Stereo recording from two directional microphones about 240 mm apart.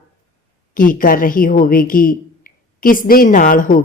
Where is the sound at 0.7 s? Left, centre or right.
Left.